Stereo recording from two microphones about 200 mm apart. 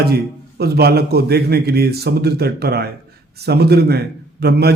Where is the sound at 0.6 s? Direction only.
50° right (ahead or behind).